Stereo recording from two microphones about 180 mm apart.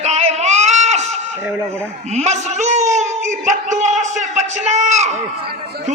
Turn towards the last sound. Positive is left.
turn(degrees=-40)  # may be behind; listen again after turning